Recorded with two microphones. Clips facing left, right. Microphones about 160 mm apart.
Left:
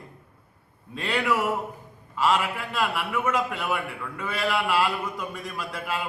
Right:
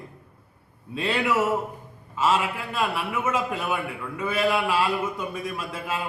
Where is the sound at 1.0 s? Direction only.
5° right (ahead or behind).